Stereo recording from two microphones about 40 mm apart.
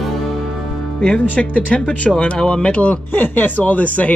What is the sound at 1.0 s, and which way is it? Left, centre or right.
Speech, left.